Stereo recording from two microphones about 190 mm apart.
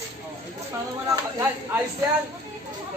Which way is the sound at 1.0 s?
20° right (ahead or behind).